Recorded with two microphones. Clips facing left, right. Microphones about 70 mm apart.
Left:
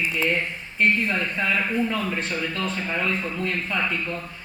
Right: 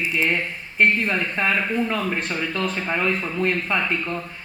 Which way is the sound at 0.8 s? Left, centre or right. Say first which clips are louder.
Right 2 dB; right.